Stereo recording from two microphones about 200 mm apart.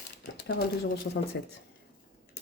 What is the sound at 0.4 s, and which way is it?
Speech, 50° left (ahead or behind).